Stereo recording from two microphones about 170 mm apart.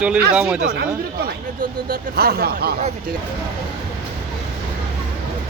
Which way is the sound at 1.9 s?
65° right (ahead or behind).